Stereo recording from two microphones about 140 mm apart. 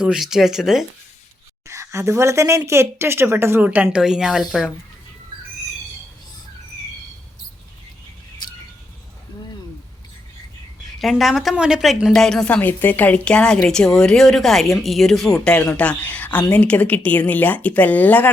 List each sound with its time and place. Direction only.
0.0 s a woman's voice: 5° right (ahead or behind)
1.6 s speech: 20° right (ahead or behind); by 4.7 s centre (ahead or behind)
11.0 s a woman's voice: centre (ahead or behind)